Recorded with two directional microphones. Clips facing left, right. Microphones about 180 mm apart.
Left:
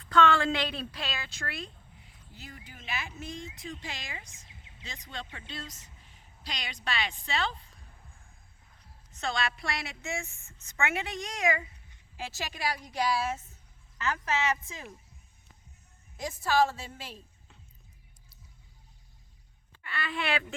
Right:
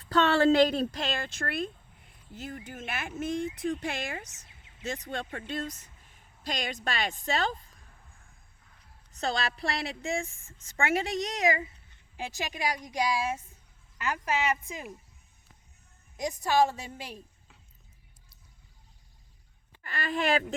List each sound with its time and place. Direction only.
0.0 s speech: 40° right (ahead or behind)
9.1 s a woman's voice: 40° right (ahead or behind)
12.2 s a woman's voice: 15° right (ahead or behind)
16.1 s a woman's voice: 15° right (ahead or behind)
19.8 s speech: 40° right (ahead or behind)